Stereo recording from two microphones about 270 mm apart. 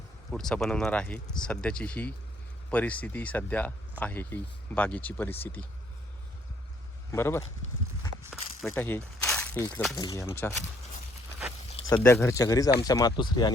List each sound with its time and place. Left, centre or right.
0.3 s speech: centre
7.1 s speech: centre
8.3 s a sound: centre
8.7 s speech: centre
11.9 s speech: centre